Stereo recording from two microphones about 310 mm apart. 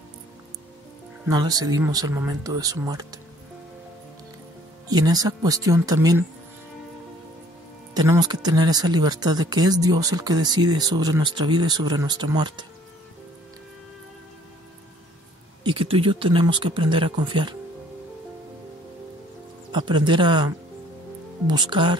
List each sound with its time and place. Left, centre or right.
1.2 s speech: centre
4.8 s speech: centre
7.9 s speech: centre
15.6 s speech: centre
19.7 s speech: centre
21.5 s speech: centre